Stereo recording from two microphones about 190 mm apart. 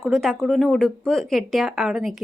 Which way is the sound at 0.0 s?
Centre (ahead or behind).